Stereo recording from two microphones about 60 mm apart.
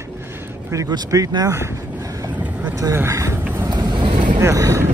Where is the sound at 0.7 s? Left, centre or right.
Right.